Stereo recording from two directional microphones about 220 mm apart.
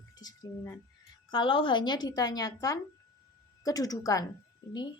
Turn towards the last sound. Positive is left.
turn(degrees=20)  # may be behind; listen again after turning